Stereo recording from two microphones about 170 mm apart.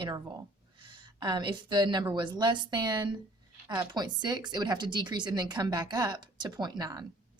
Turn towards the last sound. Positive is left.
turn(degrees=-20)  # may be behind; listen again after turning